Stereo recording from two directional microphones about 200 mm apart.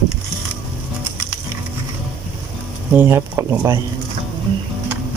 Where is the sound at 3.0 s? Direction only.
10° right (ahead or behind).